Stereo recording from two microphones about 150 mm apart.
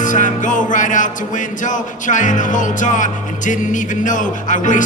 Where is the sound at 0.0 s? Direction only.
55° left (ahead or behind).